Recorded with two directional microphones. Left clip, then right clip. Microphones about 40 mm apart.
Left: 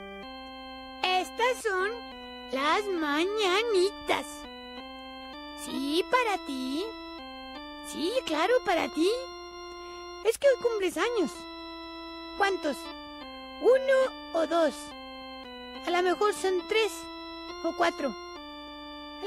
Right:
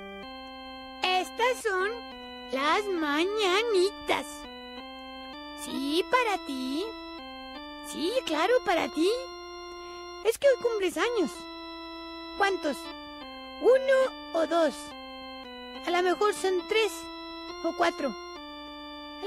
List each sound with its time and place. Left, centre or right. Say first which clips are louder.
1.0 s music: even; left
2.5 s speech: right 1 dB; left
5.7 s speech: even; left
7.9 s speech: right 1 dB; left
10.2 s speech: even; left
12.4 s speech: right 1 dB; left
15.8 s speech: even; left